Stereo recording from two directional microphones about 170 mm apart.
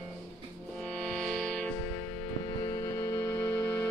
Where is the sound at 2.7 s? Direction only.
20° left (ahead or behind).